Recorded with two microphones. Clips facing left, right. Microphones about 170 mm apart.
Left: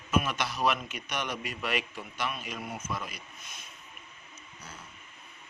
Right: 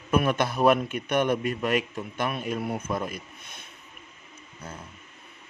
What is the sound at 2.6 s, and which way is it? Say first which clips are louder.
Speech: right 8 dB; 60° right (ahead or behind).